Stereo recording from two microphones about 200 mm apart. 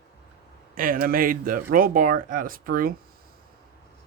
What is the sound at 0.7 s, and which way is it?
Speech, 45° right (ahead or behind).